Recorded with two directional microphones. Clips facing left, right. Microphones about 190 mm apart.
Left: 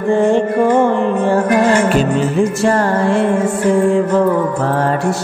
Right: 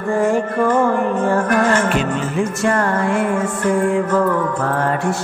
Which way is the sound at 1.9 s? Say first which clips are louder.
Left 5 dB; 35° left (ahead or behind).